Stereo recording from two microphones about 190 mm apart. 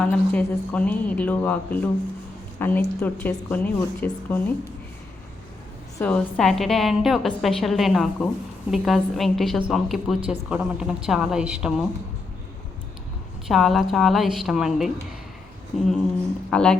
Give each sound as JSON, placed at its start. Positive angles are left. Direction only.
{"t": 0.0, "sound": "a woman's voice", "side_deg": 5}
{"t": 6.0, "sound": "a woman's voice", "side_deg": 5}
{"t": 13.5, "sound": "a woman's voice", "side_deg": 0}